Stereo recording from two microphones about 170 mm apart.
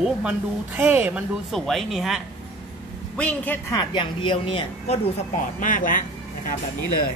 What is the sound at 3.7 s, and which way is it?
Speech, 25° left (ahead or behind).